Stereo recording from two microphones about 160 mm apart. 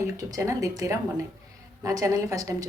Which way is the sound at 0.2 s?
20° right (ahead or behind).